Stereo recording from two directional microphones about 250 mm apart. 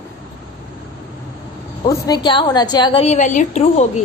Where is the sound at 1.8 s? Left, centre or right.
Centre.